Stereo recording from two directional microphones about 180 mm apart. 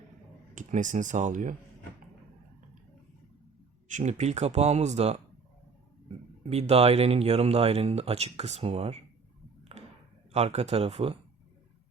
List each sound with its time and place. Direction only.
0.5 s speech: 45° right (ahead or behind)
3.8 s speech: 40° right (ahead or behind)
6.4 s speech: 35° right (ahead or behind)
9.7 s a sound: 35° right (ahead or behind)
10.3 s speech: 35° right (ahead or behind)